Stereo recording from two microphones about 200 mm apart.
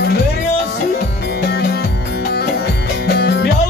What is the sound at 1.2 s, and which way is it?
Music, 55° left (ahead or behind).